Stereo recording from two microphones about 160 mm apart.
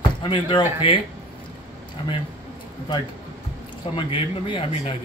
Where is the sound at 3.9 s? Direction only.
30° left (ahead or behind).